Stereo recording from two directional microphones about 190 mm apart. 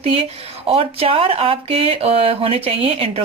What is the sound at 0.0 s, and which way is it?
A woman's voice, 30° right (ahead or behind).